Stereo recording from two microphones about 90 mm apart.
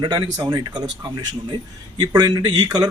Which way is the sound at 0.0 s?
50° right (ahead or behind).